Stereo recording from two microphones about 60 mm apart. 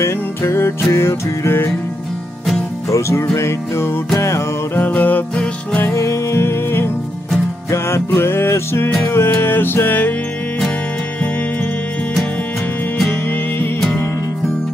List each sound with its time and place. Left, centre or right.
0.0 s music: left
2.9 s music: left
4.7 s music: left
5.3 s music: centre
5.9 s music: left